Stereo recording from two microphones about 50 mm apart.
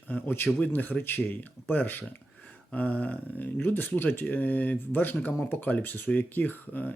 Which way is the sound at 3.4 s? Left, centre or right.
Left.